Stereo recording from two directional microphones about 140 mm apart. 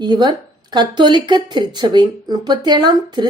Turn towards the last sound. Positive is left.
turn(degrees=-30)  # may be behind; listen again after turning